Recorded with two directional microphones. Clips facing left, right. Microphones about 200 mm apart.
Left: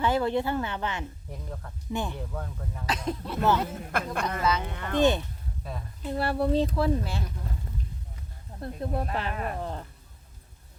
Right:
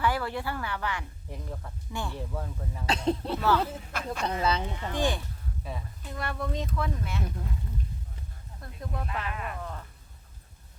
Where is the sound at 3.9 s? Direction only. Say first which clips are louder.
Left 3 dB; 55° left (ahead or behind).